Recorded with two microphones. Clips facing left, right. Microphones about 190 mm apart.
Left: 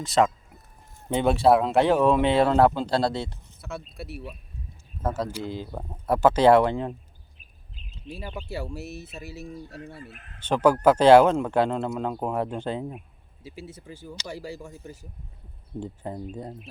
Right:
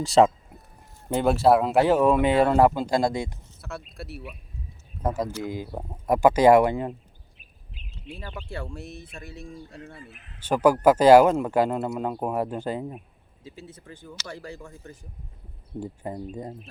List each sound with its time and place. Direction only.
0.0 s a sound: 30° right (ahead or behind)
1.1 s speech: centre (ahead or behind)
3.6 s speech: centre (ahead or behind)
5.0 s speech: 10° right (ahead or behind)
8.2 s speech: 10° left (ahead or behind)
10.0 s speech: 50° left (ahead or behind)
10.4 s speech: 10° right (ahead or behind)
13.4 s speech: 10° left (ahead or behind)
15.8 s speech: 5° right (ahead or behind)